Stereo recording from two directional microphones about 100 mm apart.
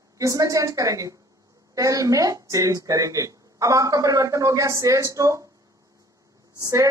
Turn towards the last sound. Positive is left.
turn(degrees=-35)  # may be behind; listen again after turning